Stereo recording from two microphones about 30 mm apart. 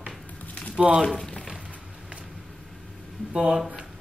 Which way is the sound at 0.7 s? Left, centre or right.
Right.